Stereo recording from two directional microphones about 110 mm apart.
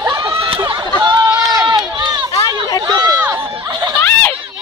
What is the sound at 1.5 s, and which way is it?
Run, 35° right (ahead or behind).